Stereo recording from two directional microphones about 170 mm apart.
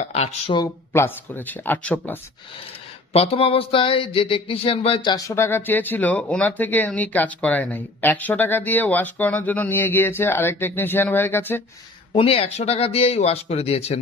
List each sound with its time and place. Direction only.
0.0 s speech: 40° left (ahead or behind)
0.5 s speech: 20° left (ahead or behind)
3.1 s speech: 35° left (ahead or behind); by 11.6 s 10° left (ahead or behind)
12.2 s speech: 35° left (ahead or behind)